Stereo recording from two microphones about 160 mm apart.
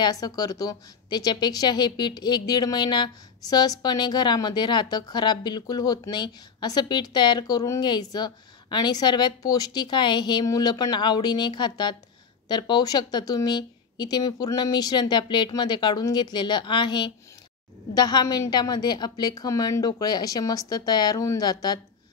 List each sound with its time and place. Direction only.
0.0 s a woman's voice: 25° left (ahead or behind)